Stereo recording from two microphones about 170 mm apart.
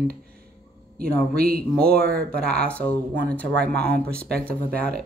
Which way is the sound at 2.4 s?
5° left (ahead or behind).